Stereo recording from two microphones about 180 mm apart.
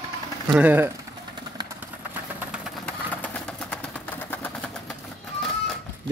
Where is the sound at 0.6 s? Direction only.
10° right (ahead or behind).